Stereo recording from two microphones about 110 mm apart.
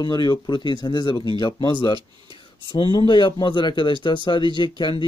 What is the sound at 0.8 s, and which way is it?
Speech, 35° left (ahead or behind).